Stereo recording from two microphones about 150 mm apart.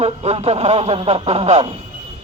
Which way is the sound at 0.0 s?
45° right (ahead or behind).